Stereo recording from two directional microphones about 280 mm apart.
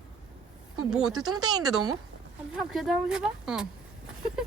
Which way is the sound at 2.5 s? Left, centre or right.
Centre.